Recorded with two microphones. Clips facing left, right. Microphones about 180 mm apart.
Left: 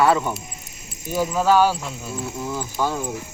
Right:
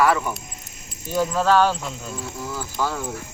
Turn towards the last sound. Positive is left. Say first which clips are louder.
# left 2 dB
turn(degrees=15)  # may be behind; listen again after turning